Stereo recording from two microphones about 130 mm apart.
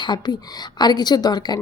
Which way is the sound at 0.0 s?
35° left (ahead or behind).